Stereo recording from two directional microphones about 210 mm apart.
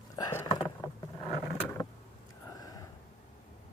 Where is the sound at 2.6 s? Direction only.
15° left (ahead or behind).